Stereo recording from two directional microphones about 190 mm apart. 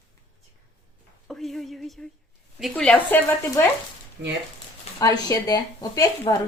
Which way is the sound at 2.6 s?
Centre (ahead or behind).